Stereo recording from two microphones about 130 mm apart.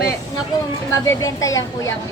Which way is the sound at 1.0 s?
25° left (ahead or behind).